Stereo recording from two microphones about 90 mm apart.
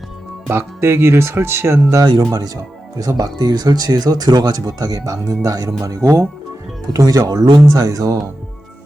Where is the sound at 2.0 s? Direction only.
55° right (ahead or behind).